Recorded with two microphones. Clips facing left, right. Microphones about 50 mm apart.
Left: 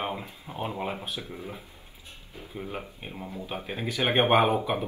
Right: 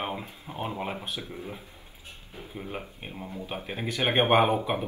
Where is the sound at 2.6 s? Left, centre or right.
Centre.